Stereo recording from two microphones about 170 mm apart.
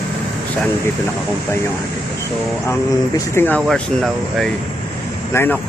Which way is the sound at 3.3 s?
10° left (ahead or behind).